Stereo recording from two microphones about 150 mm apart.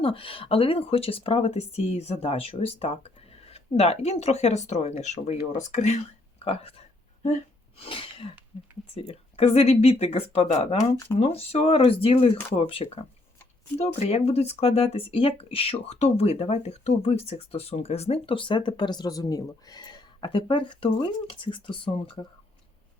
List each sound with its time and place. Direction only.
0.0 s speech: 35° left (ahead or behind)
6.4 s a sound: 40° left (ahead or behind)
7.8 s sneeze: 35° left (ahead or behind)
9.0 s speech: 40° left (ahead or behind)